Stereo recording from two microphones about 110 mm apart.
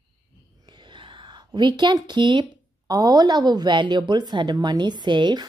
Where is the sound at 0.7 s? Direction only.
45° right (ahead or behind).